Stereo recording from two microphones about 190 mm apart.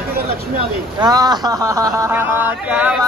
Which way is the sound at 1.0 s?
20° right (ahead or behind).